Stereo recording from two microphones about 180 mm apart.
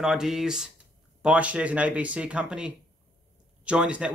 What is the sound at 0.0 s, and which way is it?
Speech, 5° right (ahead or behind).